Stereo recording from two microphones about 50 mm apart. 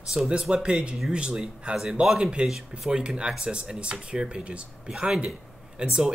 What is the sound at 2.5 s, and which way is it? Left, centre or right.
Speech, centre.